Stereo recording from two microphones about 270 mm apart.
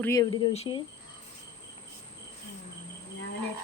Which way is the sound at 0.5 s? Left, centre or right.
Left.